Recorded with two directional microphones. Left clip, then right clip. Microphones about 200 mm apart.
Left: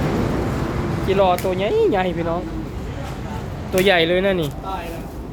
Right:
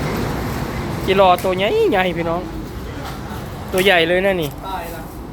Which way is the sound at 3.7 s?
Centre (ahead or behind).